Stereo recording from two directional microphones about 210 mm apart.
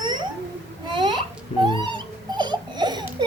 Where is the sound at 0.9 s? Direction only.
20° right (ahead or behind).